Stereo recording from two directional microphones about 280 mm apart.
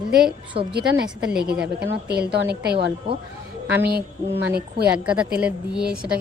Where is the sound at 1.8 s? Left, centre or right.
Right.